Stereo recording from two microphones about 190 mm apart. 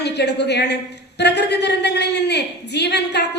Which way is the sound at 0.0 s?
60° left (ahead or behind).